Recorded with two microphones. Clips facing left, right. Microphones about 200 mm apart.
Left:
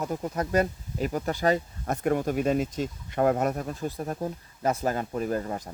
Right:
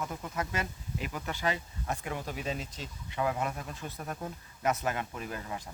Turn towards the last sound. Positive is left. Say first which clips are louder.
# left 10 dB
turn(degrees=45)  # may be behind; listen again after turning